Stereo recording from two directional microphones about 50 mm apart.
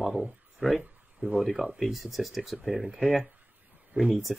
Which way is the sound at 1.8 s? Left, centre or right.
Centre.